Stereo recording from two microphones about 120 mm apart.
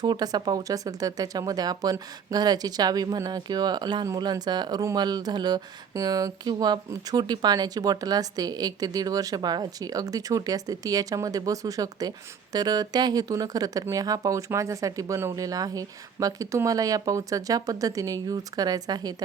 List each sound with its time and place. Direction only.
0.0 s speech: 35° right (ahead or behind)